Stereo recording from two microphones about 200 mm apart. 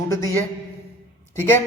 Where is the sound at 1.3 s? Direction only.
10° left (ahead or behind).